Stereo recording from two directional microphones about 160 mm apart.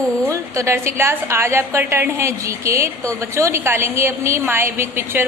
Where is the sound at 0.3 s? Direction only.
20° right (ahead or behind).